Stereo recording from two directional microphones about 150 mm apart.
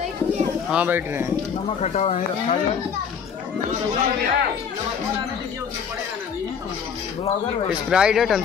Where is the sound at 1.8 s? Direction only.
45° left (ahead or behind).